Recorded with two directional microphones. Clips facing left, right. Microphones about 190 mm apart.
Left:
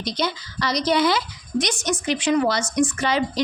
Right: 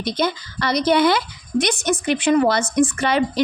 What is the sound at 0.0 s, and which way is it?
A woman's voice, 55° right (ahead or behind).